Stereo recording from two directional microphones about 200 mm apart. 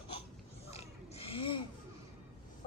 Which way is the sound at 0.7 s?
30° left (ahead or behind).